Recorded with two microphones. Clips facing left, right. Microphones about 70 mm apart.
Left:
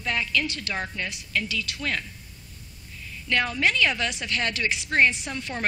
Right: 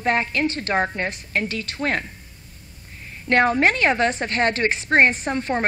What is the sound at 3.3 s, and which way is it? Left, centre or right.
A woman's voice, right.